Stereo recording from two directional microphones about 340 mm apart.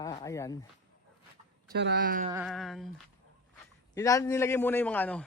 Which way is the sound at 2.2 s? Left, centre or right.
Centre.